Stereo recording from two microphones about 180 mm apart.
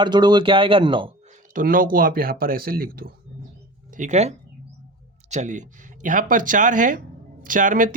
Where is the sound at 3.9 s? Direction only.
40° right (ahead or behind).